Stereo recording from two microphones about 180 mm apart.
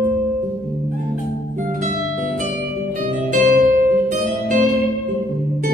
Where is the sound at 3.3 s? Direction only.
45° right (ahead or behind).